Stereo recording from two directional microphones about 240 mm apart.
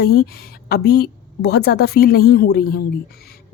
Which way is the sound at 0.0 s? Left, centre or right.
Left.